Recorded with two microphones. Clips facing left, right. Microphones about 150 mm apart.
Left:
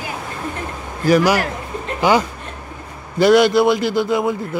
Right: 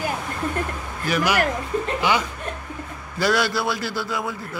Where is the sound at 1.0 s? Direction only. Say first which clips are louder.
Left 6 dB; 40° left (ahead or behind).